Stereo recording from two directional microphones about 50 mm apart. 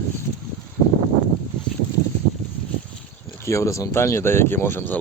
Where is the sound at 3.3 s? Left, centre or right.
Left.